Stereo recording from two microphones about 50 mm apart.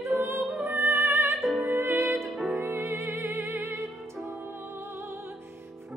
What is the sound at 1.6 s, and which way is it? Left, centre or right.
Music, right.